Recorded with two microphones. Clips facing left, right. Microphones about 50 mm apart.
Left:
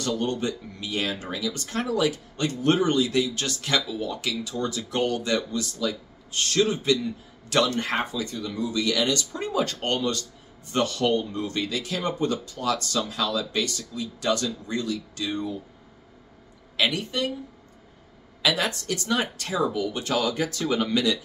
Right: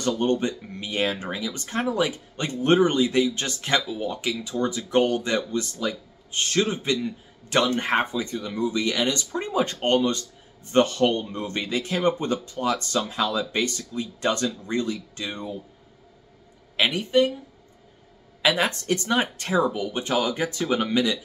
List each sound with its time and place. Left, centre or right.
0.0 s speech: right
16.7 s speech: right
18.4 s speech: right